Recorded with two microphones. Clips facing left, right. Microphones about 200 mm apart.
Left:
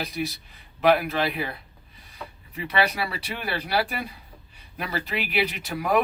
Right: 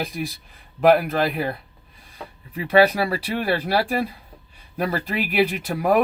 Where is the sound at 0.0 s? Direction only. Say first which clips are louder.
Right 2 dB; 50° right (ahead or behind).